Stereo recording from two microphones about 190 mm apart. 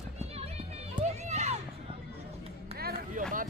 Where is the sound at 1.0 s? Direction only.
35° right (ahead or behind).